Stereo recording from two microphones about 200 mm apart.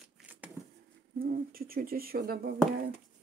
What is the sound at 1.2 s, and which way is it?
Speech, 50° right (ahead or behind).